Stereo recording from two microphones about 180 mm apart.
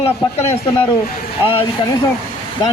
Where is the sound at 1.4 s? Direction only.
30° left (ahead or behind).